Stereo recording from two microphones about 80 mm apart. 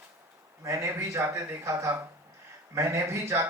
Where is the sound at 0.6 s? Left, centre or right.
Right.